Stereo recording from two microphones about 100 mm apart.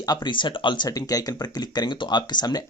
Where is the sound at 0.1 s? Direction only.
50° left (ahead or behind).